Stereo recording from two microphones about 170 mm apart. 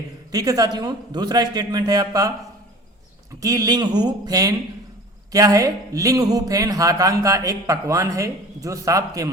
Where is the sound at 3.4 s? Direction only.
20° right (ahead or behind).